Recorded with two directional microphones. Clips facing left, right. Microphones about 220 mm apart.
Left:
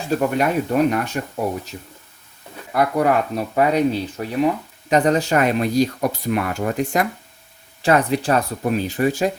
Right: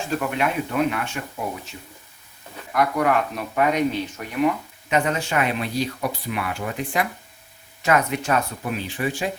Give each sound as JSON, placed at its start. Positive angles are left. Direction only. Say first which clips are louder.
{"t": 0.2, "sound": "speech", "louder": "left 5 dB", "side_deg": 40}
{"t": 2.7, "sound": "speech", "louder": "left 3 dB", "side_deg": 35}
{"t": 7.8, "sound": "speech", "louder": "left 4 dB", "side_deg": 30}